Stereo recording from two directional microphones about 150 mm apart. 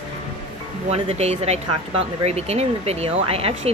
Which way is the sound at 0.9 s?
45° right (ahead or behind).